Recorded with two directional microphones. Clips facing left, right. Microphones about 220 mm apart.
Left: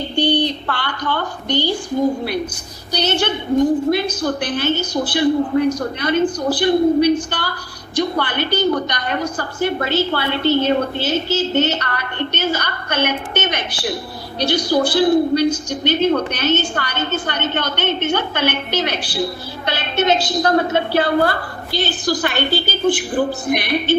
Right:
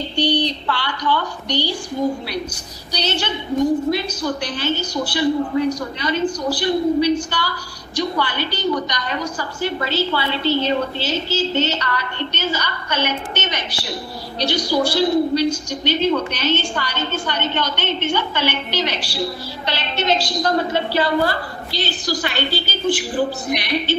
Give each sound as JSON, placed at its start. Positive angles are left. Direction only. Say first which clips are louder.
{"t": 0.2, "sound": "a woman's voice", "louder": "left 2 dB", "side_deg": 50}
{"t": 2.9, "sound": "a woman's voice", "louder": "left 4 dB", "side_deg": 55}